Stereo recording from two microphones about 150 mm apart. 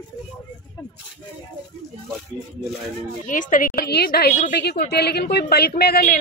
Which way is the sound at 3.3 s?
60° left (ahead or behind).